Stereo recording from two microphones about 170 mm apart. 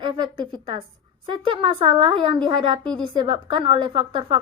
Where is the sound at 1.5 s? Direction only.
30° right (ahead or behind).